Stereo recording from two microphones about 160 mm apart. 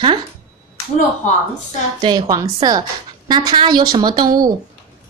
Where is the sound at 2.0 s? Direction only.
25° right (ahead or behind).